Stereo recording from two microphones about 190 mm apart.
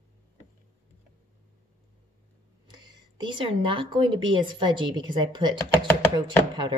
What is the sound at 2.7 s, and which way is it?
Speech, 25° right (ahead or behind).